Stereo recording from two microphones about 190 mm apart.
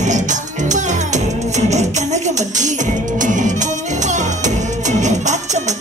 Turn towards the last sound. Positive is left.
turn(degrees=-40)  # may be behind; listen again after turning